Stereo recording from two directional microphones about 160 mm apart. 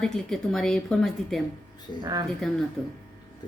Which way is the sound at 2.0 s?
25° right (ahead or behind).